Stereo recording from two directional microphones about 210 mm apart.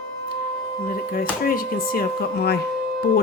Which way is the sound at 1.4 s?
45° left (ahead or behind).